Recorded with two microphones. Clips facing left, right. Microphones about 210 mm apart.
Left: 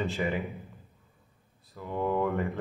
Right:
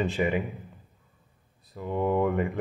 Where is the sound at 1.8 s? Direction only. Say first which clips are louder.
Right 3 dB; 20° right (ahead or behind).